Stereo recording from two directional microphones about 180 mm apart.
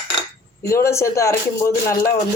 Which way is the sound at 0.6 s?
15° left (ahead or behind).